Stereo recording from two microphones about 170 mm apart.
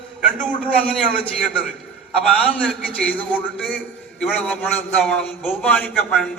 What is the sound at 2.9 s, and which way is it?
A man's voice, 10° left (ahead or behind).